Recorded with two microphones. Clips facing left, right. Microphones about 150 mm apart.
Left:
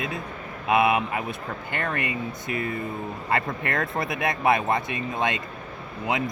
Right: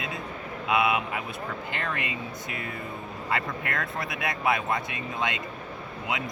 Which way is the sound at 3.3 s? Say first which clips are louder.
Left 4 dB; 50° left (ahead or behind).